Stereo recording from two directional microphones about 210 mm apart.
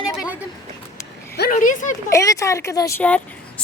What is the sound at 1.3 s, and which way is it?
Speech, 45° left (ahead or behind).